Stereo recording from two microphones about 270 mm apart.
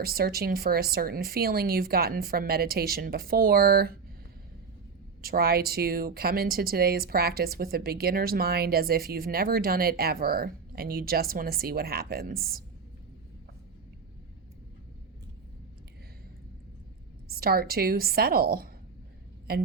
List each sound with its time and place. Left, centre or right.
0.0 s speech: right
5.2 s speech: right
17.2 s speech: right